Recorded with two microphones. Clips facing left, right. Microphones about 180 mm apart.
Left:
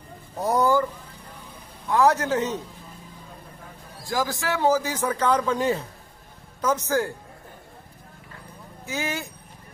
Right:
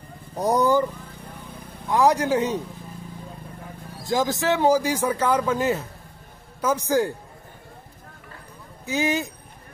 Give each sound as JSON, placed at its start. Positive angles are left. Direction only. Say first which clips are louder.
{"t": 0.4, "sound": "speech", "louder": "right 1 dB", "side_deg": -20}
{"t": 1.9, "sound": "a man's voice", "louder": "right 1 dB", "side_deg": -15}
{"t": 4.0, "sound": "a man's voice", "louder": "right 4 dB", "side_deg": -20}
{"t": 6.6, "sound": "a man's voice", "louder": "right 2 dB", "side_deg": -10}
{"t": 8.8, "sound": "a man's voice", "louder": "right 6 dB", "side_deg": -15}